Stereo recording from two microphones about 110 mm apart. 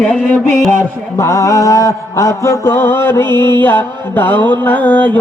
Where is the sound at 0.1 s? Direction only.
10° left (ahead or behind).